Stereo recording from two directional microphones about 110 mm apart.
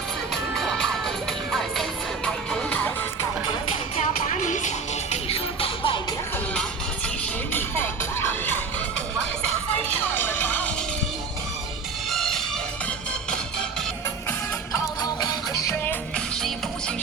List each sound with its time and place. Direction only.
0.5 s music: 5° left (ahead or behind)
3.9 s music: 80° left
5.1 s music: 60° left (ahead or behind)
7.5 s music: 20° left (ahead or behind)
10.0 s music: 20° left (ahead or behind)
12.0 s music: centre (ahead or behind)
15.0 s music: 35° left (ahead or behind)
15.8 s music: 15° left (ahead or behind)